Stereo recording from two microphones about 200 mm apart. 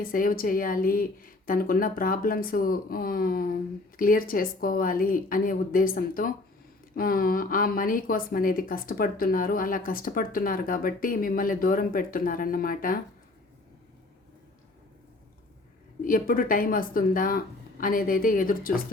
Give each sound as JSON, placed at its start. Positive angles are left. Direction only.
{"t": 0.0, "sound": "a woman's voice", "side_deg": 45}
{"t": 16.0, "sound": "a woman's voice", "side_deg": 45}